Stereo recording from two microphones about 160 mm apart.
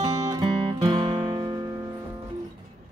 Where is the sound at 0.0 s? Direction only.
25° right (ahead or behind).